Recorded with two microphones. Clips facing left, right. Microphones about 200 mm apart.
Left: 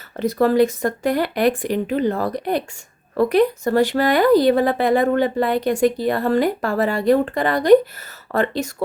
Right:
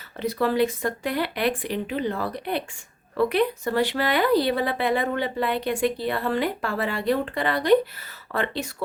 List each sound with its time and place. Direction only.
0.2 s speech: 45° left (ahead or behind)